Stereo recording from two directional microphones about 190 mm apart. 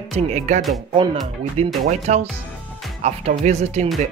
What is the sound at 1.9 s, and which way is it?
Speech, 35° right (ahead or behind).